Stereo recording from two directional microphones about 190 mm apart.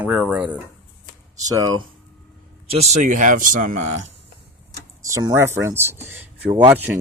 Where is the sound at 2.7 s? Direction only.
35° right (ahead or behind).